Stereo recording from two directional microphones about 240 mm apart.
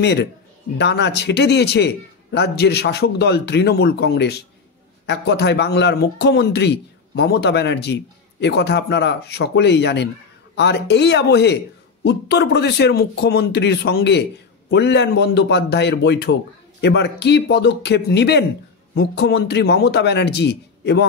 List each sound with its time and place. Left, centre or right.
0.0 s a man's voice: left